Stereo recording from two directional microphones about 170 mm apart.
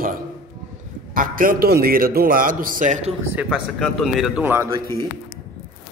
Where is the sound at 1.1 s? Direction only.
55° right (ahead or behind).